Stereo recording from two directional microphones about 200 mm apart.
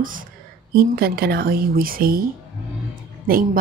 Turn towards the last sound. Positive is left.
turn(degrees=-45)  # may be behind; listen again after turning